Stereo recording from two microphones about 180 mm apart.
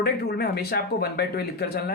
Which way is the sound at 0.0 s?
60° left (ahead or behind).